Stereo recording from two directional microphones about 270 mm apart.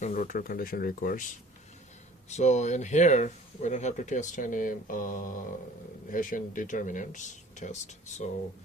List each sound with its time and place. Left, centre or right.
0.0 s speech: left
2.3 s speech: left